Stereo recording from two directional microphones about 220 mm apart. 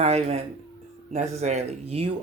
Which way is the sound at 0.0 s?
30° right (ahead or behind).